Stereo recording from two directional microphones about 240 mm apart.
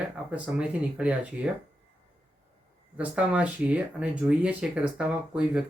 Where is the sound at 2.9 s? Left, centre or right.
Centre.